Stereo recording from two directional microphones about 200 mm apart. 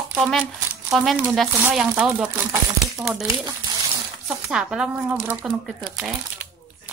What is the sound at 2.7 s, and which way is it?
Crumpling, 5° right (ahead or behind).